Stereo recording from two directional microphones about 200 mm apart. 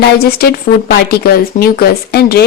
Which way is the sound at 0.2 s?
50° left (ahead or behind).